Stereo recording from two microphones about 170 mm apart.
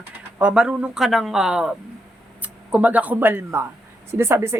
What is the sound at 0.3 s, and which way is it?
A woman's voice, 5° right (ahead or behind).